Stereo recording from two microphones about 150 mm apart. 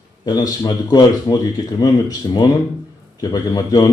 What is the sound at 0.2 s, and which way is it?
A man's voice, 25° left (ahead or behind).